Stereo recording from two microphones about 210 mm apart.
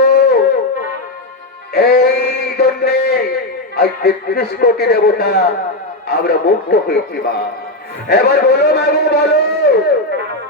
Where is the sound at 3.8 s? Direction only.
50° left (ahead or behind).